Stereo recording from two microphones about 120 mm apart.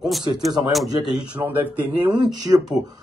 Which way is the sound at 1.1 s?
10° right (ahead or behind).